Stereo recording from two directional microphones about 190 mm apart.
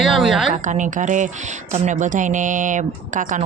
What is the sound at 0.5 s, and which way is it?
A woman's voice, 40° right (ahead or behind).